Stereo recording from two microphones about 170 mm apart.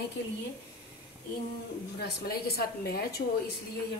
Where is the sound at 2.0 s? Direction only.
65° left (ahead or behind).